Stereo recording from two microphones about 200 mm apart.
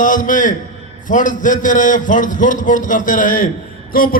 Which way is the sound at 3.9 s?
45° left (ahead or behind).